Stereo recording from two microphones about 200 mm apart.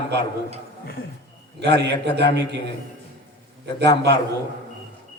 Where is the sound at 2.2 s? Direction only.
55° right (ahead or behind).